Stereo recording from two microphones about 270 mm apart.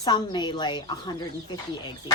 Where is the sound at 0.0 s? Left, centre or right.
Centre.